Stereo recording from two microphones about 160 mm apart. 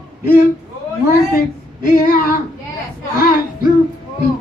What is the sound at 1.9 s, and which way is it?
Speech, 60° left (ahead or behind).